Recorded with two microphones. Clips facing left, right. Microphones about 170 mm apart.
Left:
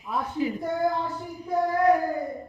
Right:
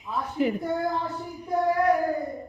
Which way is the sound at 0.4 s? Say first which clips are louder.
Right 4 dB; 60° right (ahead or behind).